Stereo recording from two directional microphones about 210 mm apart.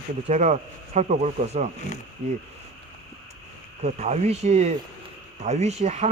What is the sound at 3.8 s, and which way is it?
Speech, 35° right (ahead or behind).